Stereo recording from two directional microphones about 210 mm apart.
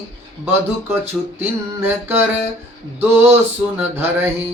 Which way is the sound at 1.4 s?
10° right (ahead or behind).